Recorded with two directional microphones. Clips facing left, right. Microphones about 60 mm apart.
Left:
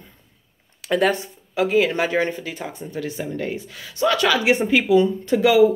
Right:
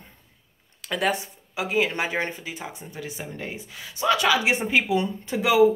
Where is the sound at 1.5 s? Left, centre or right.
Centre.